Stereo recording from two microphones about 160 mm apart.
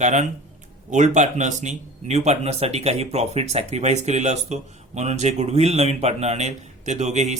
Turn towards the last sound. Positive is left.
turn(degrees=-45)  # may be behind; listen again after turning